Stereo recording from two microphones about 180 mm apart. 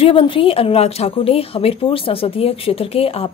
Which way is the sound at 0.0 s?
30° left (ahead or behind).